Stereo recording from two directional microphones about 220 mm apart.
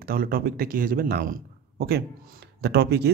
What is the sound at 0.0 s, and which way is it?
A man's voice, 40° right (ahead or behind).